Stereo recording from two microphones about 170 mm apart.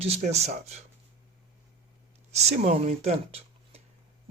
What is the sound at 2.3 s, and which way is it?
Speech, 40° right (ahead or behind).